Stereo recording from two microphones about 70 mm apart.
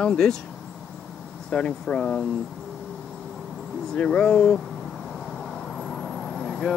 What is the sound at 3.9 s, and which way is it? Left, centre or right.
Speech, centre.